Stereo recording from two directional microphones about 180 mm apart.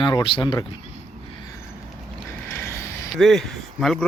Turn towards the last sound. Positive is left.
turn(degrees=0)  # may be behind; listen again after turning